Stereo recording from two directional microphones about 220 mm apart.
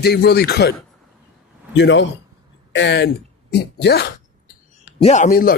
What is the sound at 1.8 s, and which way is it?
A man's voice, 55° left (ahead or behind).